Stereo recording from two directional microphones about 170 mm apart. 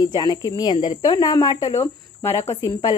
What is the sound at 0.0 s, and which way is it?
Speech, 25° left (ahead or behind).